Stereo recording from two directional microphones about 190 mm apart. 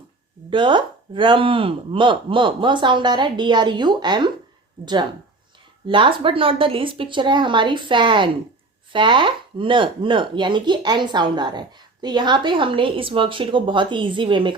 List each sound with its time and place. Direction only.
0.5 s speech: 25° right (ahead or behind)
5.8 s speech: 25° right (ahead or behind)